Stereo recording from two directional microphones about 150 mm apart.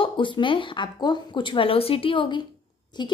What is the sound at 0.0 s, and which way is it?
A woman's voice, 35° left (ahead or behind).